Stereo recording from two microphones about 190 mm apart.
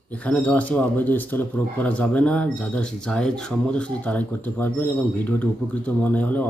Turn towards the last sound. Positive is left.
turn(degrees=10)  # may be behind; listen again after turning